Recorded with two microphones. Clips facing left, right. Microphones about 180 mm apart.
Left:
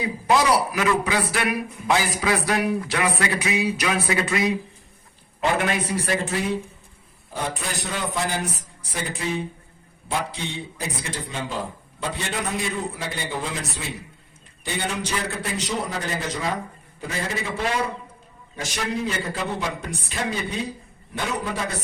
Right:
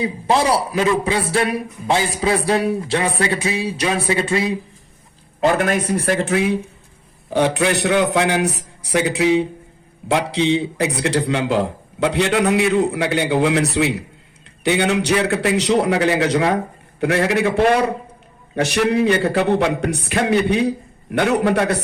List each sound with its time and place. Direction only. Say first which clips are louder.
0.0 s a man's voice: right 3 dB; 30° right (ahead or behind)
5.4 s speech: right 6 dB; 45° right (ahead or behind); by 6.5 s 60° right (ahead or behind)
7.3 s a man's voice: right 12 dB; 75° right (ahead or behind)